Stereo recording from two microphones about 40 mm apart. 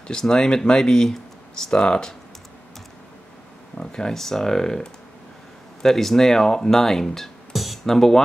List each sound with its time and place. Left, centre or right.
0.1 s speech: left
3.7 s speech: centre